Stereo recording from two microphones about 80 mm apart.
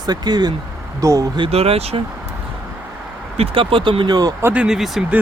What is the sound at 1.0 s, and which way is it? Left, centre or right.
Speech, right.